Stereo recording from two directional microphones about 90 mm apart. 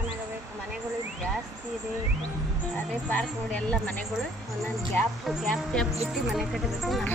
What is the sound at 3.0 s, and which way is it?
Speech, 15° left (ahead or behind).